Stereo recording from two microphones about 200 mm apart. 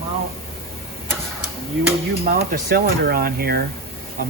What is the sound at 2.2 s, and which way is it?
Speech, 45° right (ahead or behind).